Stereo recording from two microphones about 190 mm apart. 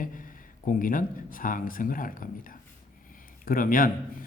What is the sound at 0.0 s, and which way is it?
Speech, 45° left (ahead or behind).